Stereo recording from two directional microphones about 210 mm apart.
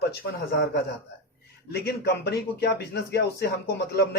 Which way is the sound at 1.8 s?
50° left (ahead or behind).